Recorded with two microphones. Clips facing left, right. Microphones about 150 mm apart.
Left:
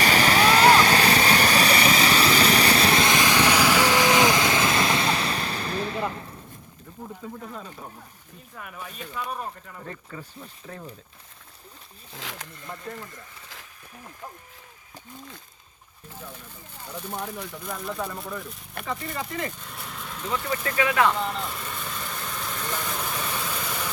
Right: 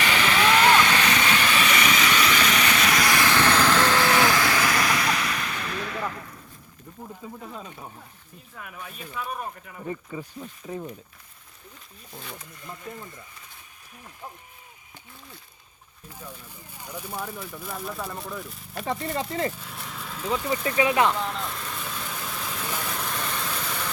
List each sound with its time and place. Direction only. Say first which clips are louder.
0.0 s vehicle: left 3 dB; 40° left (ahead or behind)
7.0 s a sound: left 2 dB; centre (ahead or behind)
8.5 s speech: left 2 dB; centre (ahead or behind)
12.1 s speech: left 2 dB; 90° left
16.7 s speech: left 1 dB; 10° right (ahead or behind)
18.9 s speech: right 3 dB; 30° right (ahead or behind)
19.5 s speech: even; centre (ahead or behind)
20.7 s speech: right 1 dB; 20° right (ahead or behind)
21.2 s vehicle: left 1 dB; centre (ahead or behind)